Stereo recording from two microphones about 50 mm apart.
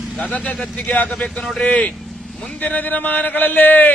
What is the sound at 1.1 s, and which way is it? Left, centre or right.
Speech, centre.